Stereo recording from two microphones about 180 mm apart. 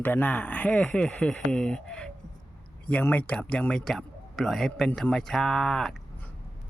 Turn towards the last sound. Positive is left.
turn(degrees=5)  # may be behind; listen again after turning